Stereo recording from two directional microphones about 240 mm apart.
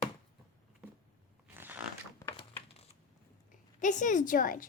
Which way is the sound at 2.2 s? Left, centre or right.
Centre.